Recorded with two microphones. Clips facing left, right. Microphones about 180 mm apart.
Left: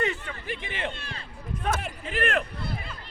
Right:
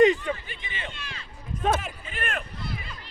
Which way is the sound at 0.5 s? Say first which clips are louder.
Left 6 dB; 65° left (ahead or behind).